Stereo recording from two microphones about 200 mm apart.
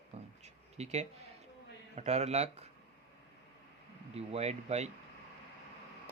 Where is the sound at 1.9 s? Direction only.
35° right (ahead or behind).